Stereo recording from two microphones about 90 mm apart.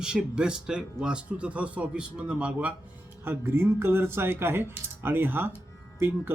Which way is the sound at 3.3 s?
25° right (ahead or behind).